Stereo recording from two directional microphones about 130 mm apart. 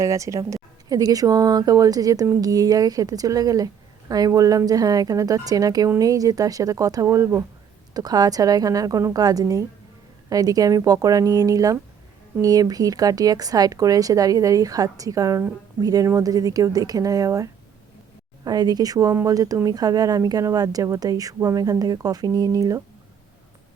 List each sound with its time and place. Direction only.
0.0 s speech: 25° right (ahead or behind)